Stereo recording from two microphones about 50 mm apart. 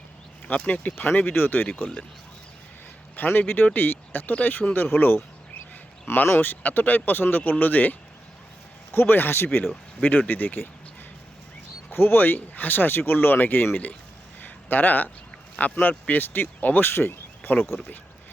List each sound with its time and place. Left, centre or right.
0.4 s speech: left
3.2 s speech: left
8.9 s speech: left
11.9 s speech: left
14.4 s a sound: left
15.7 s speech: left